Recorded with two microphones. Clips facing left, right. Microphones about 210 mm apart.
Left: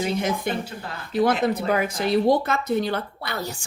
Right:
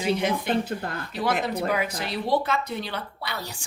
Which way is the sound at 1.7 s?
50° left (ahead or behind).